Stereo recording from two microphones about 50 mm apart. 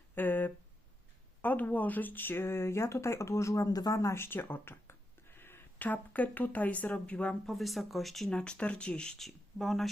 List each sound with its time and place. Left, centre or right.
0.2 s a sound: left
1.4 s speech: left
4.2 s a sound: left
5.8 s speech: left
7.4 s speech: centre
8.3 s speech: centre
9.1 s speech: centre